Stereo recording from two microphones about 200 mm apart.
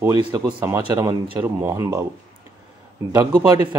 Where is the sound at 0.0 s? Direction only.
20° right (ahead or behind).